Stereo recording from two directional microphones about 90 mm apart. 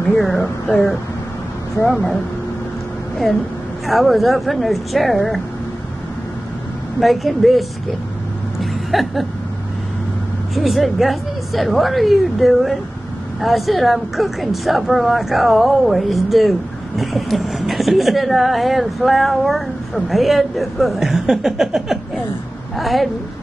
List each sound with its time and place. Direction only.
0.1 s a woman's voice: centre (ahead or behind)
3.8 s a woman's voice: centre (ahead or behind)
7.0 s a woman's voice: centre (ahead or behind)
8.5 s a sound: centre (ahead or behind)
10.5 s a woman's voice: centre (ahead or behind)